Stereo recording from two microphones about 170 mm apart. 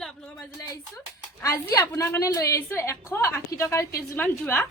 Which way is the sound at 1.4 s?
20° left (ahead or behind).